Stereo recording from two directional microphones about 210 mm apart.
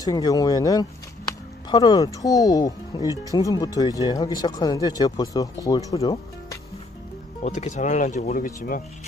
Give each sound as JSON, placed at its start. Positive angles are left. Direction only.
{"t": 0.0, "sound": "speech", "side_deg": 15}
{"t": 7.4, "sound": "speech", "side_deg": 35}